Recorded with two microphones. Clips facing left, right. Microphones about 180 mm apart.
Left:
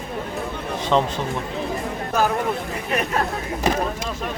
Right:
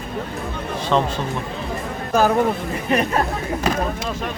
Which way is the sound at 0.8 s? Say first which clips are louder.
Even; 20° left (ahead or behind).